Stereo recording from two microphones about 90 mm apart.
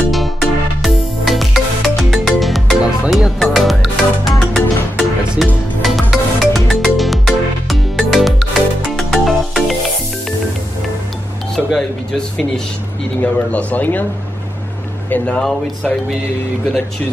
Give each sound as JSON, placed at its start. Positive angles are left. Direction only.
{"t": 0.1, "sound": "music", "side_deg": 0}
{"t": 5.8, "sound": "music", "side_deg": 0}
{"t": 11.5, "sound": "music", "side_deg": 5}
{"t": 13.2, "sound": "speech", "side_deg": 15}
{"t": 15.0, "sound": "speech", "side_deg": 15}